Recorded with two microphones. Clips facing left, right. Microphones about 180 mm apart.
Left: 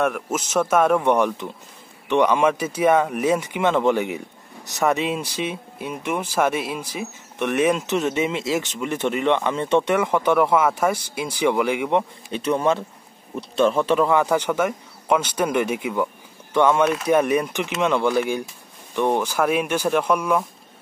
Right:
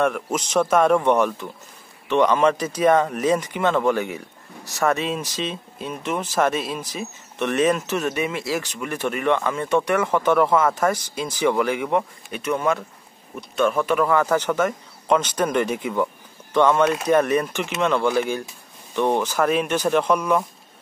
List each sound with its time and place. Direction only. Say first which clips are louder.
0.0 s speech: right 1 dB; 5° left (ahead or behind)
12.3 s speech: left 3 dB; 30° left (ahead or behind); by 20.4 s 5° left (ahead or behind)